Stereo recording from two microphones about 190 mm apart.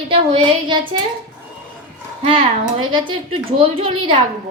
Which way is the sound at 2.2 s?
30° right (ahead or behind).